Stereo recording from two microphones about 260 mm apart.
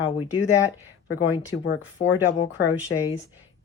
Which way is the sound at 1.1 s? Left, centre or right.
Left.